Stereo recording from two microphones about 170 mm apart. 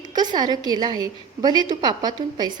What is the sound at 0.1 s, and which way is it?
A woman's voice, 25° right (ahead or behind).